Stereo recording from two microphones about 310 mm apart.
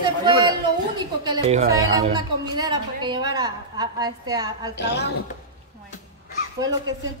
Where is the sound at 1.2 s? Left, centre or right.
Centre.